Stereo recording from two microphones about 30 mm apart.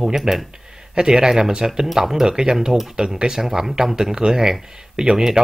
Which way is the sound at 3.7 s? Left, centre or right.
Centre.